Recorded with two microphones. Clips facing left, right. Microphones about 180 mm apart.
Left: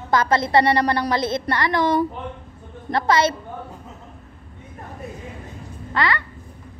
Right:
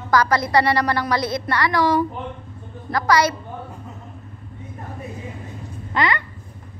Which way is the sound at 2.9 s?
25° left (ahead or behind).